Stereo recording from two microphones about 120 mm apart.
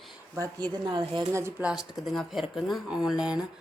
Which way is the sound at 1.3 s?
25° right (ahead or behind).